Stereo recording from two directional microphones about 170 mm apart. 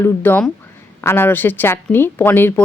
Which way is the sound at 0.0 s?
10° left (ahead or behind).